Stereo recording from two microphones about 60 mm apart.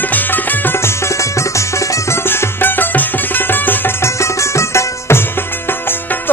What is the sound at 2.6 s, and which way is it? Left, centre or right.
Music, left.